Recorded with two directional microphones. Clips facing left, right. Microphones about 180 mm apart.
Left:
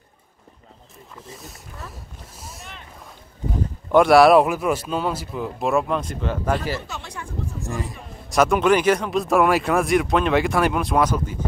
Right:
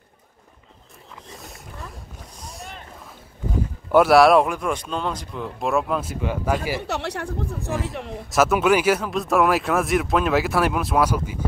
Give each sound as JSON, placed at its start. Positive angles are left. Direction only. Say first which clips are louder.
{"t": 1.4, "sound": "speech", "louder": "even", "side_deg": 0}
{"t": 2.4, "sound": "boat", "louder": "right 3 dB", "side_deg": 0}
{"t": 3.9, "sound": "speech", "louder": "left 1 dB", "side_deg": -5}
{"t": 6.9, "sound": "speech", "louder": "right 8 dB", "side_deg": -70}
{"t": 8.3, "sound": "speech", "louder": "left 1 dB", "side_deg": -5}